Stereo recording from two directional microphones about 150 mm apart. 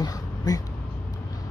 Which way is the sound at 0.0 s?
25° left (ahead or behind).